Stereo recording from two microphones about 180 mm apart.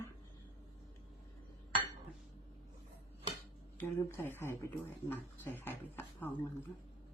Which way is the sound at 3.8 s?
15° left (ahead or behind).